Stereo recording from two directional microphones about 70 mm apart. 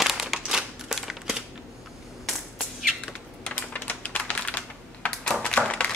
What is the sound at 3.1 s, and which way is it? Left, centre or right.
Typing, centre.